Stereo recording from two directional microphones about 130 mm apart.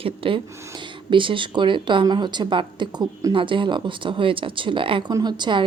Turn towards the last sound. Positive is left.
turn(degrees=-35)  # may be behind; listen again after turning